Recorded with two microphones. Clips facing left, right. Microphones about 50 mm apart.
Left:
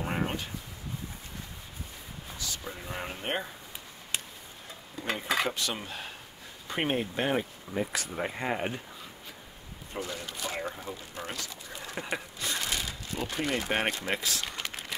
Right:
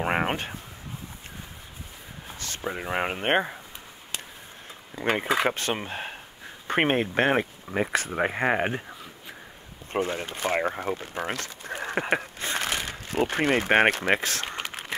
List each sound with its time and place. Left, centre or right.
0.0 s a sound: right
2.3 s speech: right
4.9 s speech: right
6.7 s speech: right
7.9 s speech: right
9.9 s speech: right
14.1 s speech: right